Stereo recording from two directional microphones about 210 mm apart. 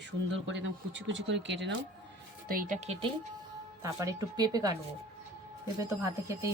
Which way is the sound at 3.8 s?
15° right (ahead or behind).